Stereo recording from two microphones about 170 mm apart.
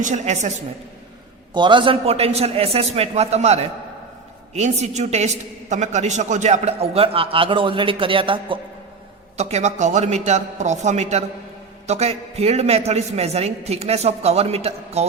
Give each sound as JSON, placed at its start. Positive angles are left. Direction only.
{"t": 0.0, "sound": "a woman's voice", "side_deg": -45}
{"t": 1.5, "sound": "a man's voice", "side_deg": -30}
{"t": 9.4, "sound": "a man's voice", "side_deg": -40}